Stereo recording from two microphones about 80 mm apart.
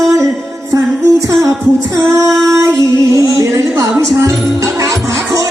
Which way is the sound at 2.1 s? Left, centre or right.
Right.